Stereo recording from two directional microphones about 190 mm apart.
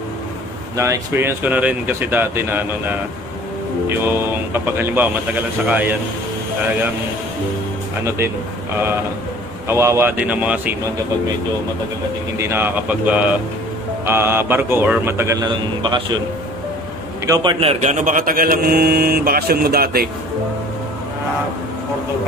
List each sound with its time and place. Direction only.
0.7 s speech: 15° right (ahead or behind)
9.7 s speech: 15° right (ahead or behind)
12.4 s speech: 10° right (ahead or behind)
17.3 s a man's voice: 25° right (ahead or behind); by 20.1 s 55° right (ahead or behind)